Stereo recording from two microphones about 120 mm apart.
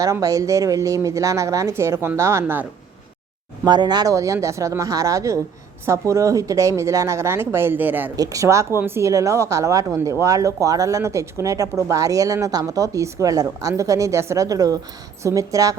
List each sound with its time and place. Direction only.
0.0 s a woman's voice: 30° right (ahead or behind)
3.6 s a woman's voice: 35° right (ahead or behind); by 8.1 s 15° right (ahead or behind)
8.1 s a woman's voice: 30° right (ahead or behind)